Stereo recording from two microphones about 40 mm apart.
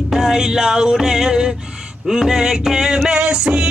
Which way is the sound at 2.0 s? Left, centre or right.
Centre.